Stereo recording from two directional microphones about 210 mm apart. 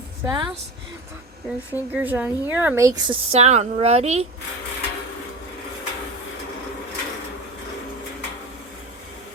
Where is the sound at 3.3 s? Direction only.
30° right (ahead or behind).